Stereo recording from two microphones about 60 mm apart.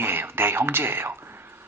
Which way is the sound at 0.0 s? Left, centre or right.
Right.